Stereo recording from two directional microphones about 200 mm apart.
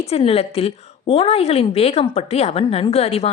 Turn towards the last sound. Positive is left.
turn(degrees=30)  # may be behind; listen again after turning